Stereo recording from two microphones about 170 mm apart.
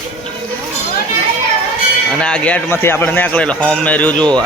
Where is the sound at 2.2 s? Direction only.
5° left (ahead or behind).